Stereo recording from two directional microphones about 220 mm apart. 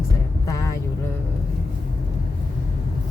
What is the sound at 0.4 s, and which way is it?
Vehicle, 15° left (ahead or behind).